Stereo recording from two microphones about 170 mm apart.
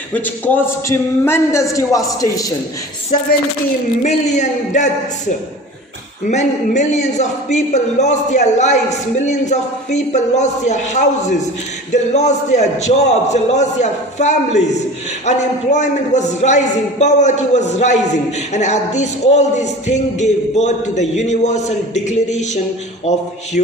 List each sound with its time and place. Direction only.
0.1 s a man's voice: 10° left (ahead or behind)
4.0 s speech: 45° left (ahead or behind)
6.2 s speech: 45° left (ahead or behind)